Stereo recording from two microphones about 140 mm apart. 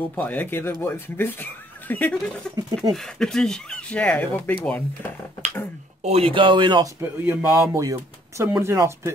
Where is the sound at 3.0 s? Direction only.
5° left (ahead or behind).